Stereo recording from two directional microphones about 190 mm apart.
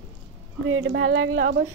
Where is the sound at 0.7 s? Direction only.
90° right.